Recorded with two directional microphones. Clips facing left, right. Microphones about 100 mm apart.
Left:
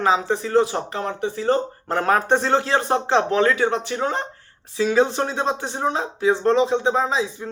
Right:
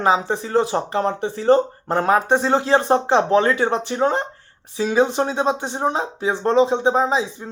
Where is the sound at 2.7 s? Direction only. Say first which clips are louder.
Right 3 dB; 20° right (ahead or behind).